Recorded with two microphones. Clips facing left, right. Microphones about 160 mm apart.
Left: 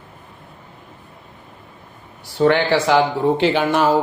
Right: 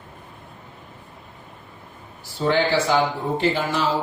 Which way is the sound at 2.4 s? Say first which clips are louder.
Left 4 dB; 65° left (ahead or behind).